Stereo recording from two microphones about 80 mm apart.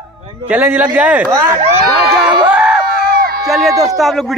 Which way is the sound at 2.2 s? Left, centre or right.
Centre.